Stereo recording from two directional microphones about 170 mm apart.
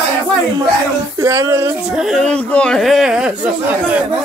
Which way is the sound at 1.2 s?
15° right (ahead or behind).